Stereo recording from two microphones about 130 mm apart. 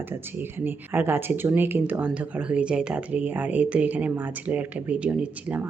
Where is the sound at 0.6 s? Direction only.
15° right (ahead or behind).